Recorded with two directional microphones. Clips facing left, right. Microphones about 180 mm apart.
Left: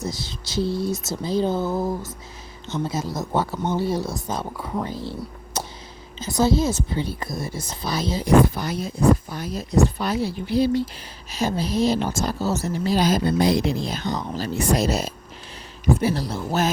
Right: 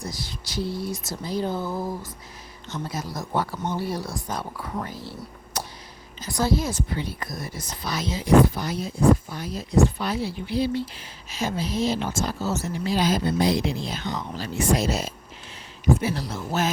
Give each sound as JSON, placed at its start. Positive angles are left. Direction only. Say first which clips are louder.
{"t": 0.0, "sound": "speech", "louder": "left 4 dB", "side_deg": 25}
{"t": 5.5, "sound": "a sound", "louder": "left 3 dB", "side_deg": 25}
{"t": 6.1, "sound": "speech", "louder": "left 4 dB", "side_deg": 25}
{"t": 8.5, "sound": "speech", "louder": "left 2 dB", "side_deg": 55}
{"t": 9.3, "sound": "speech", "louder": "left 1 dB", "side_deg": 45}